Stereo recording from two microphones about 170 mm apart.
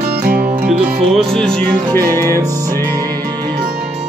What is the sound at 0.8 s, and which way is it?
Music, centre (ahead or behind).